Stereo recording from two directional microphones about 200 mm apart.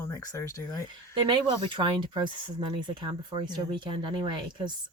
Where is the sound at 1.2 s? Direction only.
25° right (ahead or behind).